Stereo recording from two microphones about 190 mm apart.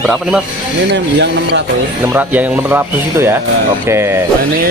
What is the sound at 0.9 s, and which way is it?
Speech, 70° right (ahead or behind).